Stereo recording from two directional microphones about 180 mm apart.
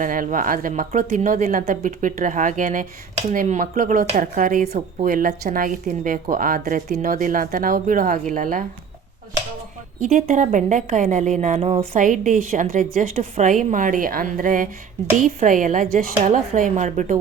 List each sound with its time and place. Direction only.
0.0 s a woman's voice: 50° right (ahead or behind)
10.0 s a woman's voice: 40° right (ahead or behind)
11.9 s a woman's voice: 45° right (ahead or behind)